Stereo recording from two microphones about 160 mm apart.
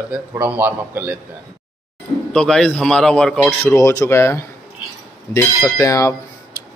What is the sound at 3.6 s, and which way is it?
Speech, 15° left (ahead or behind).